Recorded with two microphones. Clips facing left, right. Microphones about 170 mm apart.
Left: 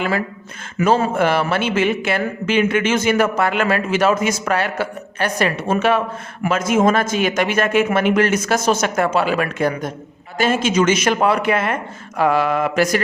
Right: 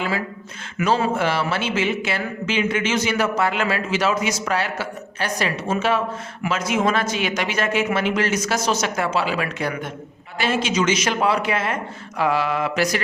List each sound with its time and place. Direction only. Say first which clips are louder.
0.8 s speech: left 4 dB; 45° left (ahead or behind)
6.4 s speech: left 5 dB; 50° left (ahead or behind)